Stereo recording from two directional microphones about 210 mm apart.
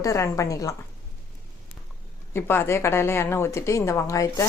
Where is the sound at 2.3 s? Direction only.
10° left (ahead or behind).